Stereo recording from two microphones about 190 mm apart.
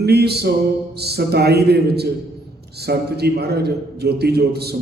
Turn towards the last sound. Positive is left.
turn(degrees=-60)  # may be behind; listen again after turning